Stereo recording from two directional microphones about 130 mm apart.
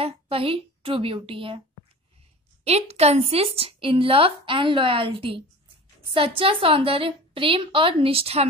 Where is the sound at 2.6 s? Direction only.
55° right (ahead or behind).